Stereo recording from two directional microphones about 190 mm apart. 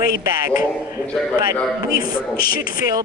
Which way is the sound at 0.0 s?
20° right (ahead or behind).